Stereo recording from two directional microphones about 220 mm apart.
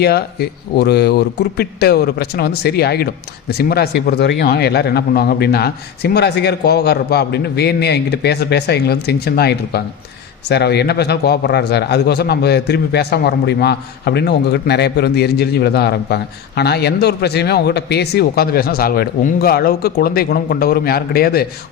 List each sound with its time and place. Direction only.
0.0 s a man's voice: 45° left (ahead or behind)